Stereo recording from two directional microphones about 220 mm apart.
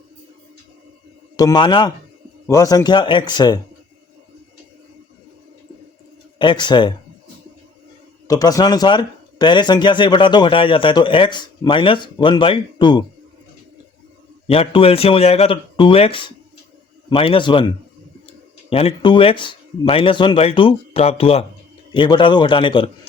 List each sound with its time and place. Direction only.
1.4 s speech: 20° left (ahead or behind)
6.4 s speech: 20° left (ahead or behind)
8.3 s speech: 15° left (ahead or behind)
14.4 s speech: 25° left (ahead or behind)
18.7 s speech: 25° left (ahead or behind)